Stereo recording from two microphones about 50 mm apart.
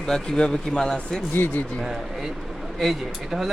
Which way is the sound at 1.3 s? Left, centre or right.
Left.